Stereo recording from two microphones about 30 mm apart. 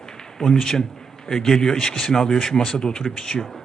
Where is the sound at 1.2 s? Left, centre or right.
Centre.